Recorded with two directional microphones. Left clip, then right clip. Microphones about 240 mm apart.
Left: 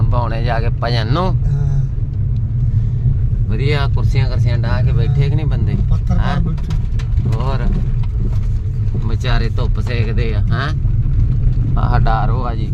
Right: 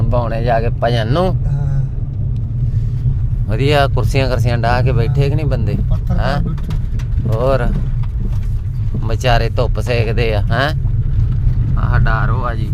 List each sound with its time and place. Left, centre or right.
0.1 s speech: centre
3.5 s speech: right
7.4 s speech: right
9.0 s speech: right
11.8 s speech: centre